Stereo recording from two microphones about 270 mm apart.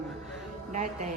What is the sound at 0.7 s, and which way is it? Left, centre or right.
Music, right.